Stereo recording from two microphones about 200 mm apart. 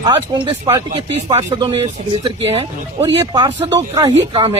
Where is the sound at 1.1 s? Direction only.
30° right (ahead or behind); by 4.1 s 15° right (ahead or behind).